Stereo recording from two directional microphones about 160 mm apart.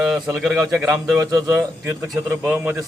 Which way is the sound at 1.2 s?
25° right (ahead or behind).